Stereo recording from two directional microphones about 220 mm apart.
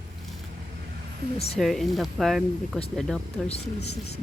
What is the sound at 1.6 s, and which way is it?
Speech, centre (ahead or behind).